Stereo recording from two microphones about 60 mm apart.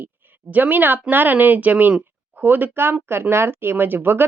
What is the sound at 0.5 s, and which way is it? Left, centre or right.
Speech, right.